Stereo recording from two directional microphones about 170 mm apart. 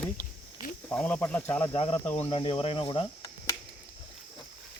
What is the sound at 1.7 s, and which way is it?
Speech, 30° left (ahead or behind).